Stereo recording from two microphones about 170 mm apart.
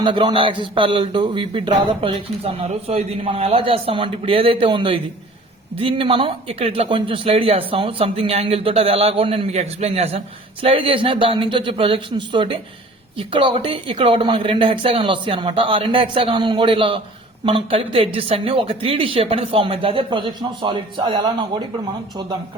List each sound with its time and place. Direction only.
0.0 s speech: 25° right (ahead or behind)